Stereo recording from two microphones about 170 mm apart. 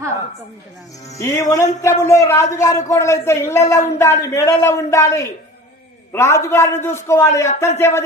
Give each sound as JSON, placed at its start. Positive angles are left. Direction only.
{"t": 1.1, "sound": "a woman's voice", "side_deg": 20}